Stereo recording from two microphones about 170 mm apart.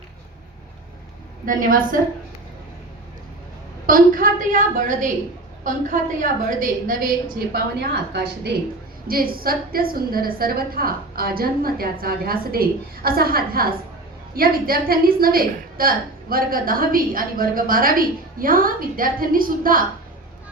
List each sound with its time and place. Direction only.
1.5 s a woman's voice: 55° right (ahead or behind)
3.8 s a woman's voice: 55° right (ahead or behind)
9.0 s a woman's voice: 60° right (ahead or behind)